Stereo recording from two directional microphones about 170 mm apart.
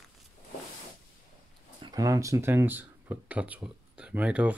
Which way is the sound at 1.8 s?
20° right (ahead or behind).